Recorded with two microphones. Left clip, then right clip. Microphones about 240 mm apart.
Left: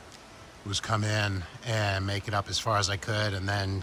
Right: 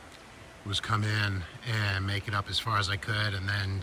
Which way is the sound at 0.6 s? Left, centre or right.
Centre.